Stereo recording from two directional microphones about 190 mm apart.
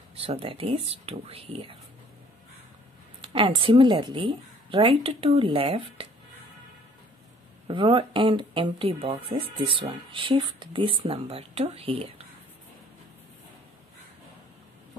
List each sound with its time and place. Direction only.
0.2 s speech: 30° right (ahead or behind)
3.3 s speech: 25° right (ahead or behind)
7.6 s speech: 25° right (ahead or behind)